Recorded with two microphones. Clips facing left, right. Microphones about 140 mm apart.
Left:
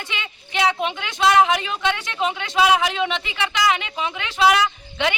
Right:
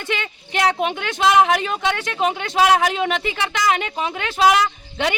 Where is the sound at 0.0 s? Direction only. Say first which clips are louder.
Right 6 dB; 50° right (ahead or behind).